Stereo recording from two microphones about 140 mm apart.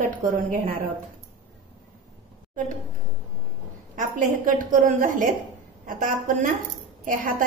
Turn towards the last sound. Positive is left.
turn(degrees=-75)  # may be behind; listen again after turning